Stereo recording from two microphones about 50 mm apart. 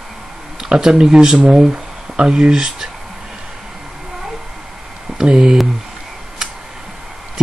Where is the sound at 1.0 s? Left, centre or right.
Centre.